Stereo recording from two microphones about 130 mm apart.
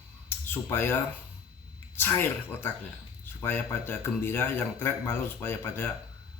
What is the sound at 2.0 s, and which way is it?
Speech, 15° left (ahead or behind).